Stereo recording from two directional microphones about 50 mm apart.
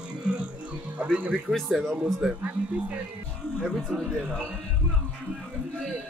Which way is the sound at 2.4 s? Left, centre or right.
Right.